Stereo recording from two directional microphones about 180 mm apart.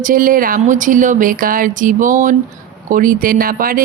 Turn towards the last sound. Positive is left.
turn(degrees=-50)  # may be behind; listen again after turning